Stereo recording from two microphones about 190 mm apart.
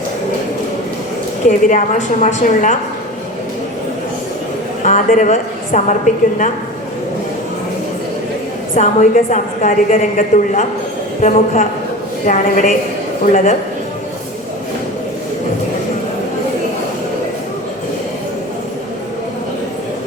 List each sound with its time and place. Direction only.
1.5 s a woman's voice: 40° left (ahead or behind)
4.8 s a woman's voice: 40° left (ahead or behind)
8.7 s a woman's voice: 40° left (ahead or behind)